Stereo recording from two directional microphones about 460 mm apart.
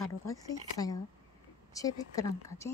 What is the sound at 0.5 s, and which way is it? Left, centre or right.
A woman's voice, centre.